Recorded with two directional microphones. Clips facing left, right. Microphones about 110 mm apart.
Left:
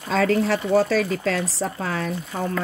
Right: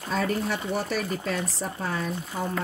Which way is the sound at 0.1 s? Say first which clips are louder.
Left 7 dB; 90° left.